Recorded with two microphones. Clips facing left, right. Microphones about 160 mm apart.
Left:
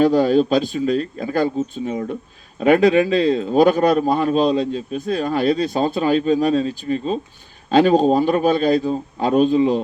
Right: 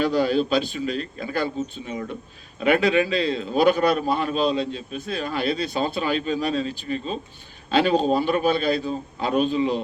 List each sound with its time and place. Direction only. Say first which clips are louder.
0.0 s a man's voice: left 6 dB; 40° left (ahead or behind)